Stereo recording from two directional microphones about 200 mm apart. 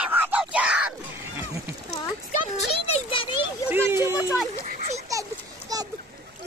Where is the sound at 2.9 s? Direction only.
25° left (ahead or behind).